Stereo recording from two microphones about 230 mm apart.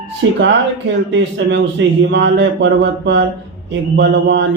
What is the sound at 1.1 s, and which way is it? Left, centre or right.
A man's voice, right.